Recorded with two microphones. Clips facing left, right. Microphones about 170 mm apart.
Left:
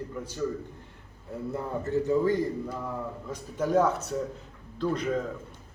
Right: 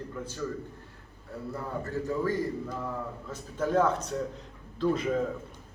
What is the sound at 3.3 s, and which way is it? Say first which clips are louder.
Speech: left 2 dB; 10° left (ahead or behind).